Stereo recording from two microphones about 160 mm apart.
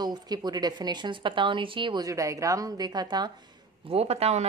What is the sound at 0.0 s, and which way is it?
Speech, 25° right (ahead or behind).